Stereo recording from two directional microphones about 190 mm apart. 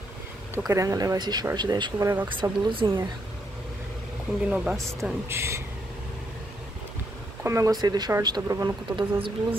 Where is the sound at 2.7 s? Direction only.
25° right (ahead or behind).